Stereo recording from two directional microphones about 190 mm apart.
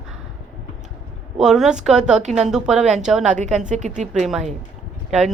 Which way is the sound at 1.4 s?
5° right (ahead or behind).